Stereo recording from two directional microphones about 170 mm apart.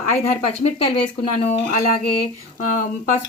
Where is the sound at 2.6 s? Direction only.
50° left (ahead or behind).